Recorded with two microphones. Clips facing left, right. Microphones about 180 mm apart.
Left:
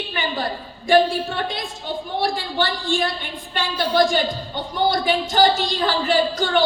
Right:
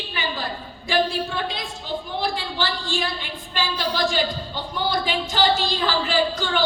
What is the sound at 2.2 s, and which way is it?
A woman's voice, 50° left (ahead or behind).